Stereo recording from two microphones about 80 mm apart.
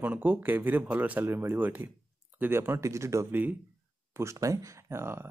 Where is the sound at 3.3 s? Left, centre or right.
Right.